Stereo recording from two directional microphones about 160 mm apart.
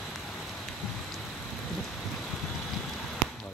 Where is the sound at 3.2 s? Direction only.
Centre (ahead or behind).